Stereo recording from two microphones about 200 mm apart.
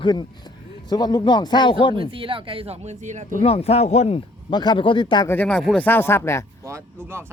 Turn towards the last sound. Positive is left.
turn(degrees=-10)  # may be behind; listen again after turning